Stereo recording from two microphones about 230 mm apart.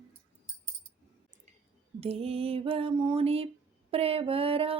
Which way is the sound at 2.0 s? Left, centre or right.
Right.